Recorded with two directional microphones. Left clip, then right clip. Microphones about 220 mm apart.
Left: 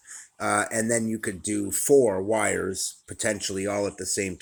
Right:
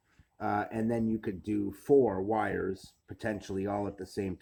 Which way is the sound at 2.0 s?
20° left (ahead or behind).